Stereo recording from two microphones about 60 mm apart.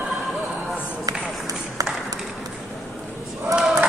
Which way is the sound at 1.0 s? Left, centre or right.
Right.